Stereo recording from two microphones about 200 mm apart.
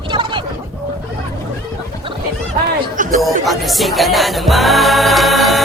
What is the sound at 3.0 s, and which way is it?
Chatter, 40° right (ahead or behind).